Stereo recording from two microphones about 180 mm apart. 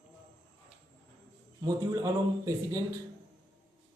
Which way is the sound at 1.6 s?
20° right (ahead or behind).